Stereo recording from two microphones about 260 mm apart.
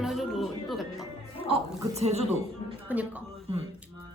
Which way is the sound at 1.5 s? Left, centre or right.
Centre.